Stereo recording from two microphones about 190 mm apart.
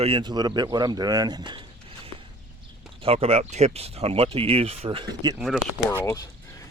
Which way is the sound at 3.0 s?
30° right (ahead or behind).